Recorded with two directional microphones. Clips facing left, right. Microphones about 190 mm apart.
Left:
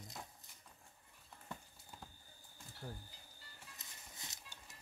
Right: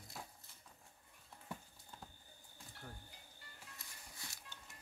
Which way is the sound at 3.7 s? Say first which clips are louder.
Even; 20° left (ahead or behind).